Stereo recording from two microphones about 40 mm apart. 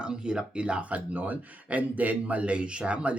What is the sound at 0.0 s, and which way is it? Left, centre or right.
Speech, right.